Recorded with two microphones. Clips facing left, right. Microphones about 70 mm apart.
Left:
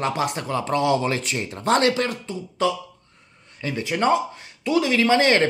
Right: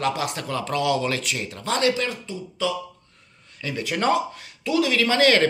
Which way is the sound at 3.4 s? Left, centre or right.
Left.